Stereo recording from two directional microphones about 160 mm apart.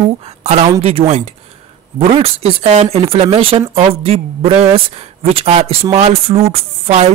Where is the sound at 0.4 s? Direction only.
40° right (ahead or behind).